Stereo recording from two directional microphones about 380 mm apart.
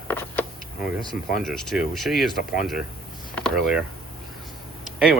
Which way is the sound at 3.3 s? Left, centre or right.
Centre.